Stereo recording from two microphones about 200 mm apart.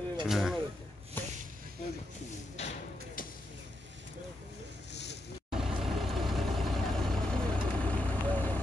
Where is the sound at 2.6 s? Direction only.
35° left (ahead or behind).